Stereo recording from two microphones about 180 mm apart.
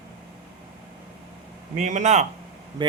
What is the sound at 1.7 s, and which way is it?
Speech, 45° right (ahead or behind).